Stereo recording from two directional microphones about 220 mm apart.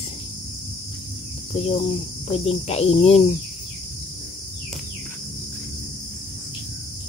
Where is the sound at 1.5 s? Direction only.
25° left (ahead or behind).